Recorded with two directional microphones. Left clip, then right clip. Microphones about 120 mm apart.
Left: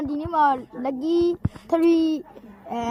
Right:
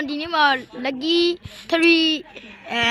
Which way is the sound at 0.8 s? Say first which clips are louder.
Right 2 dB; centre (ahead or behind).